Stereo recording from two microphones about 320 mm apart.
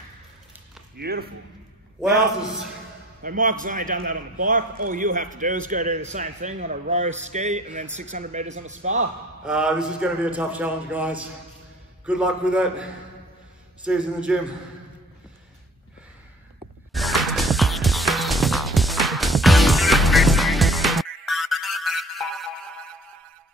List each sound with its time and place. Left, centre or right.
0.9 s speech: right
3.2 s a man's voice: right
9.4 s speech: centre
13.8 s speech: centre
16.9 s music: centre